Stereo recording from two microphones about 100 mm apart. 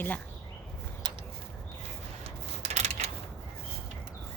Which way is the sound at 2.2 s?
90° right.